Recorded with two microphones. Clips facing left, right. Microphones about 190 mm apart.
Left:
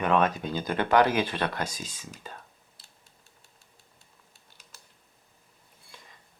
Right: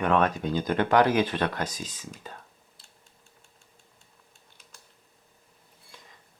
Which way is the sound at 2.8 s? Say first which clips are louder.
Right 1 dB; 5° left (ahead or behind).